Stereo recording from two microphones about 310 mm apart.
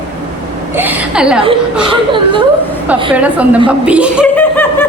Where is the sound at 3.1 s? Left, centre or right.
Centre.